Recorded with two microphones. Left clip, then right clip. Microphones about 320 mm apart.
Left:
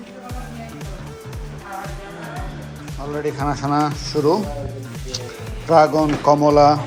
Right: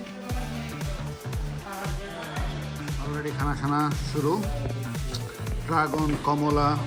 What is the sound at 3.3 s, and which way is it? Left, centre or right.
Speech, centre.